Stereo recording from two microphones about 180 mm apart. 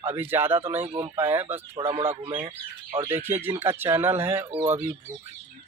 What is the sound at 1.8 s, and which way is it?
Speech, 30° right (ahead or behind).